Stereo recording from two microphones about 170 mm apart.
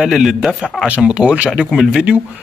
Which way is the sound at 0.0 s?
Centre (ahead or behind).